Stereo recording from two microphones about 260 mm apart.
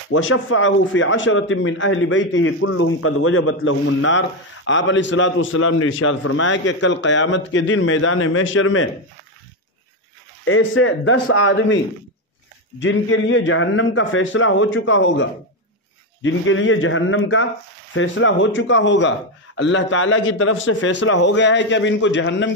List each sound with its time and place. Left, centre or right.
0.1 s a man's voice: left
10.4 s a man's voice: left
12.8 s a man's voice: left